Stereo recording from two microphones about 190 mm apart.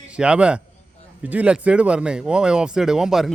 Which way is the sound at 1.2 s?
5° right (ahead or behind).